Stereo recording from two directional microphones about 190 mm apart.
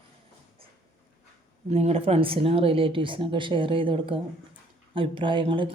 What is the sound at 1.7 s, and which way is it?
A woman's voice, 35° right (ahead or behind).